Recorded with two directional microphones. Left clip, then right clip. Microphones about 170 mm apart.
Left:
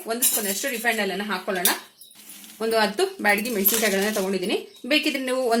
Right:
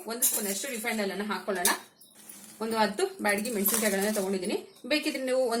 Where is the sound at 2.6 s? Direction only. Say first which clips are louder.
Left 6 dB; 55° left (ahead or behind).